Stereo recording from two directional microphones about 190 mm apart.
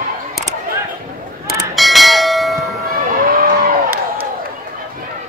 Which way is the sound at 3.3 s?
50° right (ahead or behind).